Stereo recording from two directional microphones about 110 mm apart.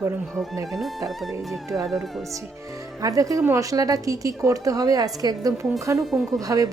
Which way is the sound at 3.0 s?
30° right (ahead or behind).